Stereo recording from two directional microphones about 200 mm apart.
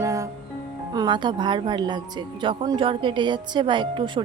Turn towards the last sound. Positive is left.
turn(degrees=-25)  # may be behind; listen again after turning